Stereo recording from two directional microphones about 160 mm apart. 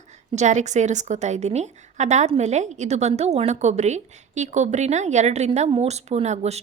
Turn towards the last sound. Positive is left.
turn(degrees=-45)  # may be behind; listen again after turning